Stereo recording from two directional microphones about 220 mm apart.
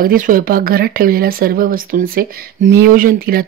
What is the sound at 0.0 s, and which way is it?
Speech, 40° right (ahead or behind).